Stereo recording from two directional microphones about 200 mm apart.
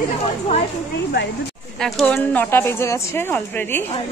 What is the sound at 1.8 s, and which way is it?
Speech, 5° left (ahead or behind).